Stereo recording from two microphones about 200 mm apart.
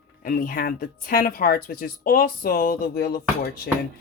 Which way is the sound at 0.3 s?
45° left (ahead or behind).